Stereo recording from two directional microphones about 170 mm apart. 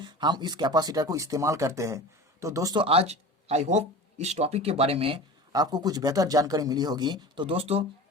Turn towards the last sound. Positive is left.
turn(degrees=-35)  # may be behind; listen again after turning